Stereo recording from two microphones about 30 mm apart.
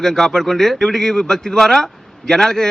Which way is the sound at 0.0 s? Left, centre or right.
Centre.